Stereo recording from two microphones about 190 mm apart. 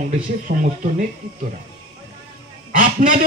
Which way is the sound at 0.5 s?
45° right (ahead or behind).